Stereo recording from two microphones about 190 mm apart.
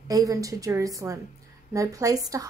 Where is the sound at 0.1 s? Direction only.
20° right (ahead or behind).